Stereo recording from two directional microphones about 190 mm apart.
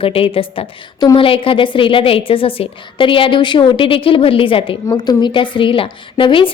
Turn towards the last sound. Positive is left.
turn(degrees=25)  # may be behind; listen again after turning